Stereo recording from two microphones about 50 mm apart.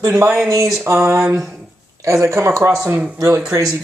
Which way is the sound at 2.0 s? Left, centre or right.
Right.